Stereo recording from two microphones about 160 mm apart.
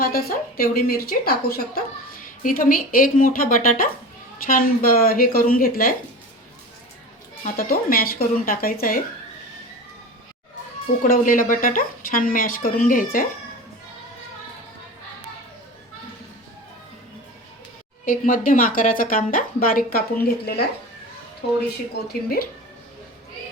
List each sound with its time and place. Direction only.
0.0 s a woman's voice: 65° left (ahead or behind)
2.2 s speech: 60° left (ahead or behind)
7.4 s speech: 60° left (ahead or behind)
11.0 s speech: 55° left (ahead or behind)
18.0 s speech: 60° left (ahead or behind); by 20.7 s 80° left